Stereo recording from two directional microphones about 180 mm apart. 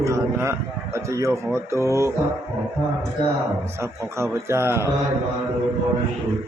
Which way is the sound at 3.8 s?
15° right (ahead or behind).